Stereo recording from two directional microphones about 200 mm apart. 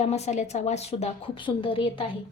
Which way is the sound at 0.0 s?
35° left (ahead or behind).